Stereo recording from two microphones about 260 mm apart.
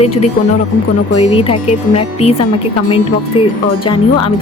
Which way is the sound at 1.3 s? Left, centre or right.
Left.